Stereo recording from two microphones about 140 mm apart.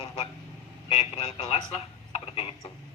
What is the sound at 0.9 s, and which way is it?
Speech, 45° left (ahead or behind).